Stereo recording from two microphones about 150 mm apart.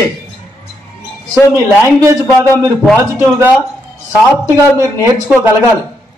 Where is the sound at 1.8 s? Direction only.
20° right (ahead or behind).